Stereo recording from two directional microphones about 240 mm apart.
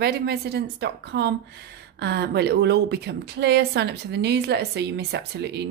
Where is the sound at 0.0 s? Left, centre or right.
Right.